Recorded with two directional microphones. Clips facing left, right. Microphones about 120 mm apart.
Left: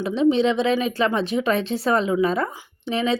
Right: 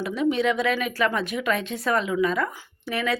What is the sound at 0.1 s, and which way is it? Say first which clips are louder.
Speech: left 5 dB; 25° left (ahead or behind).